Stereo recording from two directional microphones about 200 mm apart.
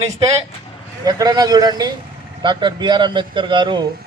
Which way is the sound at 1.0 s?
20° right (ahead or behind).